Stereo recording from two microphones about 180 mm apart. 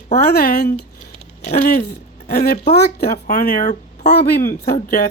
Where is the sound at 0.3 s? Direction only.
60° left (ahead or behind); by 4.3 s 45° left (ahead or behind).